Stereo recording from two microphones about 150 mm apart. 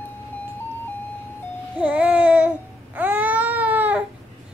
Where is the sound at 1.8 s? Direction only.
10° right (ahead or behind).